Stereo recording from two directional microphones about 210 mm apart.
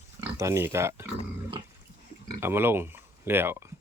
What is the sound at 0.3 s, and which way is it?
Speech, 15° right (ahead or behind).